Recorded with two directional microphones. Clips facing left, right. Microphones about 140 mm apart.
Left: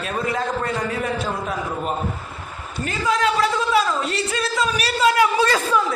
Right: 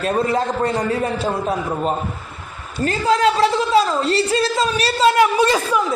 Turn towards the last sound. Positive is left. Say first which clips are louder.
# right 2 dB
turn(degrees=-15)  # may be behind; listen again after turning